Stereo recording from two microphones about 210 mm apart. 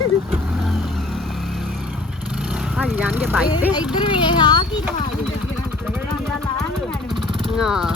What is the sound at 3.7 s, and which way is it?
Speech, 20° left (ahead or behind).